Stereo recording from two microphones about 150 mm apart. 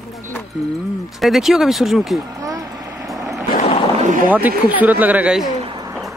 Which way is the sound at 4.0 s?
60° right (ahead or behind).